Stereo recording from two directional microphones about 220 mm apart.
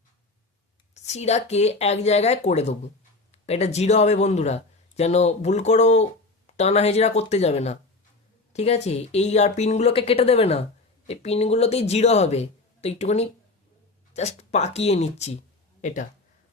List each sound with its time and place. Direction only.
0.9 s speech: 30° left (ahead or behind)